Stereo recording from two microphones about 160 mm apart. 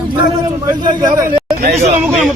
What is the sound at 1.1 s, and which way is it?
Speech, 60° right (ahead or behind).